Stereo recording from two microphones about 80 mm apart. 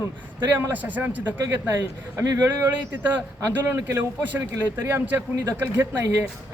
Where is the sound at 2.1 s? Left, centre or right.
Right.